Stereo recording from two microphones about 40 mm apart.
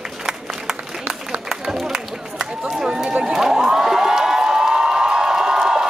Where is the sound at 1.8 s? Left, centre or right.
Centre.